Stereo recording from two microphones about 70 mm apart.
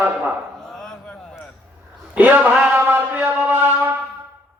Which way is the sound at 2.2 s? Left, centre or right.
Right.